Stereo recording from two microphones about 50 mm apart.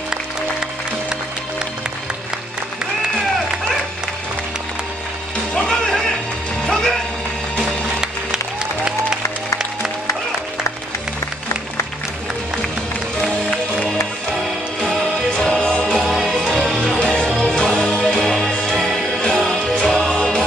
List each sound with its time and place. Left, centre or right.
5.5 s music: centre
15.3 s music: centre